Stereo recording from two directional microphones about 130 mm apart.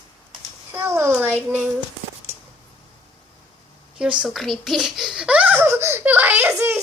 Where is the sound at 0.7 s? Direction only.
20° right (ahead or behind).